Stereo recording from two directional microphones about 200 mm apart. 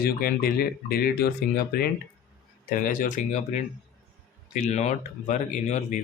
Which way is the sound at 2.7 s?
40° left (ahead or behind).